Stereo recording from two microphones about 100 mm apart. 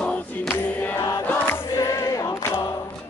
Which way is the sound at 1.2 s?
20° left (ahead or behind).